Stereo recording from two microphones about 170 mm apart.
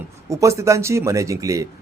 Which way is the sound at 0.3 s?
15° right (ahead or behind).